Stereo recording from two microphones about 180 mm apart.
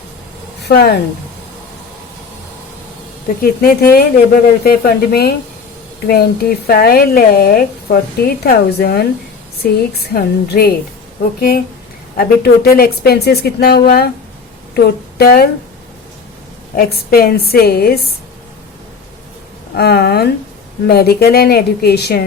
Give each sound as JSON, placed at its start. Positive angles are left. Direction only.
{"t": 0.6, "sound": "speech", "side_deg": 60}
{"t": 3.4, "sound": "speech", "side_deg": 55}
{"t": 16.7, "sound": "speech", "side_deg": 55}
{"t": 19.7, "sound": "speech", "side_deg": 60}